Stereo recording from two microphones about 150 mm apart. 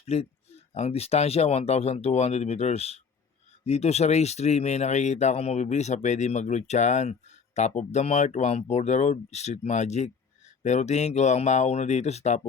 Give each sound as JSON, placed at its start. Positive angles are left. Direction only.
{"t": 0.0, "sound": "speech", "side_deg": 45}